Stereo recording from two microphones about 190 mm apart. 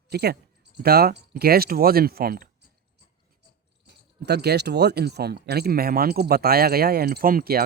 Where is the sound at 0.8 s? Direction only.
55° right (ahead or behind).